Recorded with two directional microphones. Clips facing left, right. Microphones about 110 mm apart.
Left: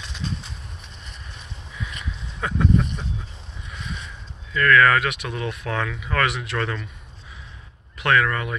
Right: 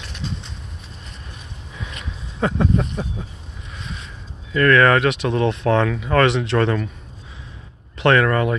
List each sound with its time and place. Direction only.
2.4 s speech: 30° right (ahead or behind)
4.5 s speech: 35° right (ahead or behind)
8.0 s speech: 35° right (ahead or behind)